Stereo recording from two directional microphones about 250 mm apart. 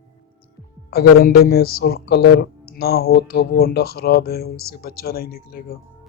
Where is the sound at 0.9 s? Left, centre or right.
Left.